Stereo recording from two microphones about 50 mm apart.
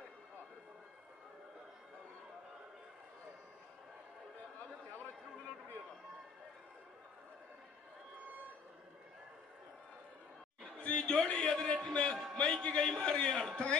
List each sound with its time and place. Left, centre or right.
10.8 s a sound: left
11.3 s music: centre
12.4 s a man's voice: centre